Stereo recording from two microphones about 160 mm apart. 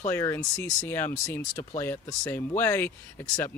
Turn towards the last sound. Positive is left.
turn(degrees=15)  # may be behind; listen again after turning